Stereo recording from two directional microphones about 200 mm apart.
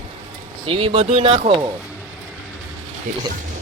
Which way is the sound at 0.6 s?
25° right (ahead or behind).